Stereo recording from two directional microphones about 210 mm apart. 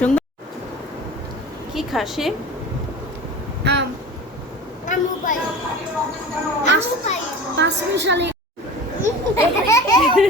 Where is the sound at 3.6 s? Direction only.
55° right (ahead or behind).